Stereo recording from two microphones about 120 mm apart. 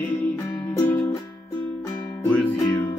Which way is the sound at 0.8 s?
15° left (ahead or behind).